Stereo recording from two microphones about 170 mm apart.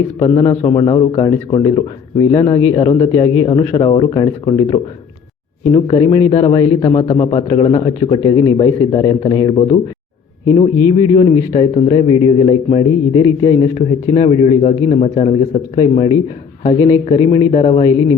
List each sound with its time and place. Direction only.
0.2 s a man's voice: 35° left (ahead or behind)
8.6 s a man's voice: 20° left (ahead or behind)
17.5 s a man's voice: 35° left (ahead or behind)